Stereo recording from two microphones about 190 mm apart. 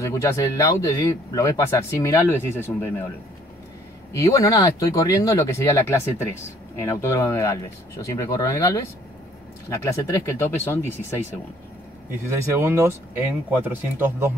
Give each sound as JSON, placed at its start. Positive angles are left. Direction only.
{"t": 0.0, "sound": "a man's voice", "side_deg": 15}
{"t": 4.1, "sound": "a man's voice", "side_deg": 15}
{"t": 12.4, "sound": "speech", "side_deg": -15}